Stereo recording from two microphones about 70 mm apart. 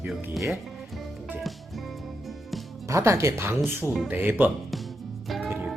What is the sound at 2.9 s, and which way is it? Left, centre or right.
Speech, right.